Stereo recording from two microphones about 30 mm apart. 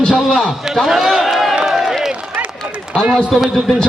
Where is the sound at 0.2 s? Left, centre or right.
Centre.